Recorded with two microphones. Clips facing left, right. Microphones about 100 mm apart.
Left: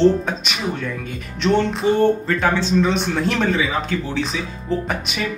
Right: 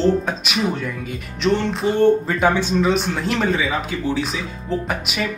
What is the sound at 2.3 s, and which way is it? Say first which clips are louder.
Speech: right 1 dB; 15° right (ahead or behind).